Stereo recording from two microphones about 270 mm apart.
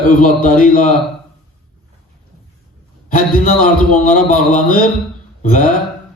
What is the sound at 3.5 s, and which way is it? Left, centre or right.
A man's voice, left.